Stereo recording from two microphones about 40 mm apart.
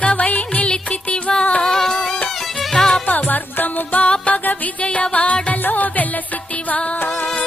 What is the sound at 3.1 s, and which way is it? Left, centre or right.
Music, left.